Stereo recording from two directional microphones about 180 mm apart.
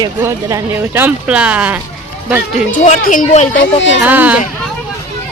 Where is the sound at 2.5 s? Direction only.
40° left (ahead or behind).